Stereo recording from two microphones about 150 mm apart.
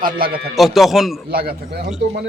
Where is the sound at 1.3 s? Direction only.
90° right.